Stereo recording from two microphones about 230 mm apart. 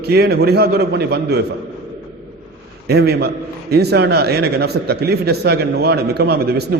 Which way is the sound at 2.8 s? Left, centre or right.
Right.